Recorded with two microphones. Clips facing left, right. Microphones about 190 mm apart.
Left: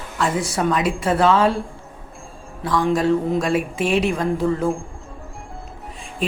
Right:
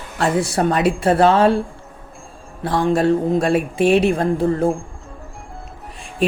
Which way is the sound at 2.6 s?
60° right (ahead or behind).